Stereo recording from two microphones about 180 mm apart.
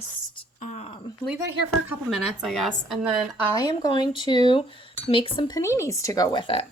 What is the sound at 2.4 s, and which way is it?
Speech, centre (ahead or behind).